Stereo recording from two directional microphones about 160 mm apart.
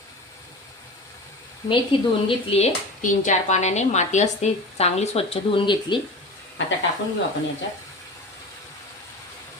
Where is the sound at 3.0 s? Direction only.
55° left (ahead or behind); by 6.0 s 30° left (ahead or behind).